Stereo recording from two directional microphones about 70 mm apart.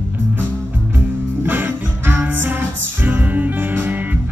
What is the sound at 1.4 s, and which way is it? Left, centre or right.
Music, right.